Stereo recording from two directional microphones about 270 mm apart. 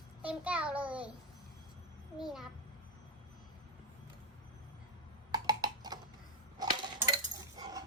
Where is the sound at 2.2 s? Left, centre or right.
Centre.